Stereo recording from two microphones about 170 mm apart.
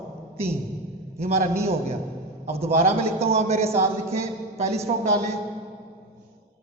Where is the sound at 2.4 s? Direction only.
40° right (ahead or behind).